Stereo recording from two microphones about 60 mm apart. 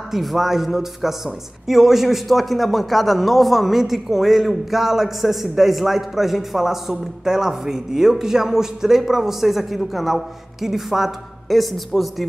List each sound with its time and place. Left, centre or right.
0.1 s a man's voice: centre